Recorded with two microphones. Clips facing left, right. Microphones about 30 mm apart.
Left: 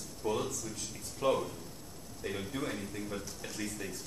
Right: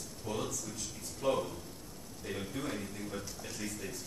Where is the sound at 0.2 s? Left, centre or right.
Left.